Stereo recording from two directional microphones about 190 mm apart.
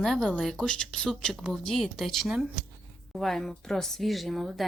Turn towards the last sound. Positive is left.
turn(degrees=0)  # may be behind; listen again after turning